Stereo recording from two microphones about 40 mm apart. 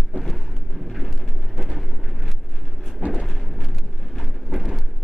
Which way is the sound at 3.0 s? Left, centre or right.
Right.